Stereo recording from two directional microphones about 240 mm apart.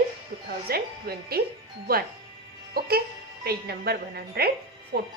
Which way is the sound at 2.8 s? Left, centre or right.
Right.